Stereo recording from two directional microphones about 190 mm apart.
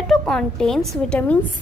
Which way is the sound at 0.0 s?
5° left (ahead or behind).